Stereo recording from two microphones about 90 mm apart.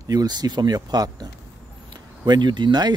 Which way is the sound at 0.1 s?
45° right (ahead or behind).